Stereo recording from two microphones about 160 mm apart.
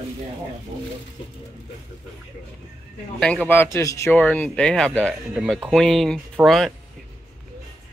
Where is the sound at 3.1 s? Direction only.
5° left (ahead or behind).